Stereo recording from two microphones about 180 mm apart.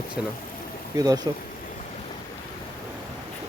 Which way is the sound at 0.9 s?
20° right (ahead or behind).